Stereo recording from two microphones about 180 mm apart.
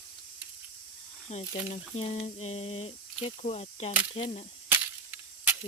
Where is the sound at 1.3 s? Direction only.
35° left (ahead or behind).